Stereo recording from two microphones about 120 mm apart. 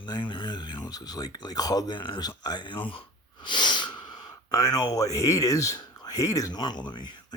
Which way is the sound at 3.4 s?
40° left (ahead or behind).